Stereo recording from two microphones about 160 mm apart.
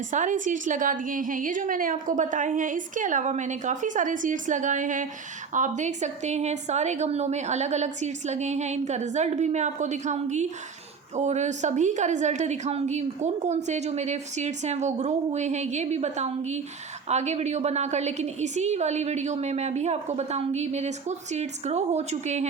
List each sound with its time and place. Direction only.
0.1 s a woman's voice: 50° right (ahead or behind)